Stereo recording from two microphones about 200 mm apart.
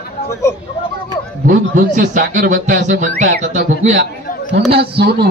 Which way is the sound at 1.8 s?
45° right (ahead or behind).